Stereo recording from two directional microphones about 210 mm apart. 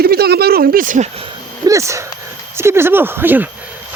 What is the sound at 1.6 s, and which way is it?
Speech, 15° right (ahead or behind).